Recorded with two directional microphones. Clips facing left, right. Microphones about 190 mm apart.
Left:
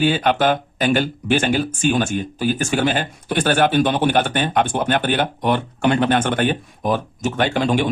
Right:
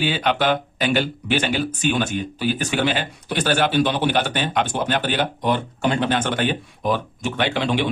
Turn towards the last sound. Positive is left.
turn(degrees=45)  # may be behind; listen again after turning